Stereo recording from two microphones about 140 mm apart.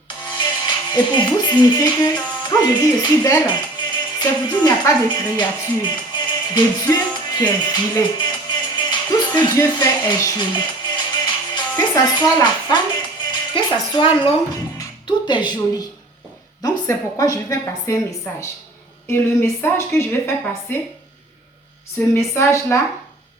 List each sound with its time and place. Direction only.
0.3 s speech: 35° left (ahead or behind)
6.9 s music: 30° left (ahead or behind)
9.6 s speech: 30° left (ahead or behind)
11.5 s music: 30° left (ahead or behind)
14.5 s a woman's voice: 30° left (ahead or behind)
22.1 s a woman's voice: 20° left (ahead or behind)